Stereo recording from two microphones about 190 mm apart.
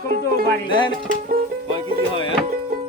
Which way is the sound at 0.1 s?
55° right (ahead or behind).